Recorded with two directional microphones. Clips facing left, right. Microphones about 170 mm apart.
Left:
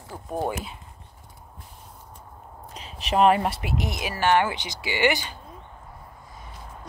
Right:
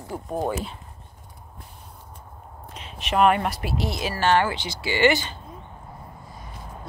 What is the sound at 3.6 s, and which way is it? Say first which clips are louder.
Speech: right 2 dB; 15° left (ahead or behind).